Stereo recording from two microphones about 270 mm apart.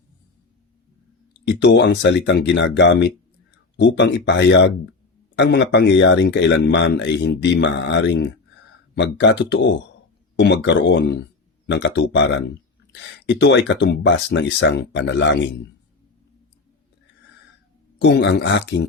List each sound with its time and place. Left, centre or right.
1.5 s speech: left
18.0 s speech: left